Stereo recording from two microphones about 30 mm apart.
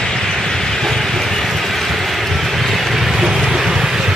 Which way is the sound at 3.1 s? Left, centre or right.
Centre.